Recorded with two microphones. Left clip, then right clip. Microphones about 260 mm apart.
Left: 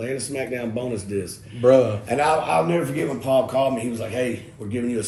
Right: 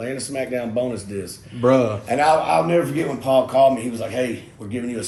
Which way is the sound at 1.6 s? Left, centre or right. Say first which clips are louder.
Left 1 dB; right.